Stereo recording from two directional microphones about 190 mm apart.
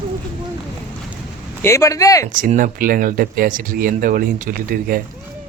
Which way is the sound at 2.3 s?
45° right (ahead or behind).